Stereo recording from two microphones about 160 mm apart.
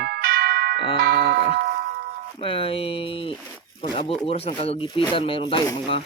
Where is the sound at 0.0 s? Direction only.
75° right (ahead or behind).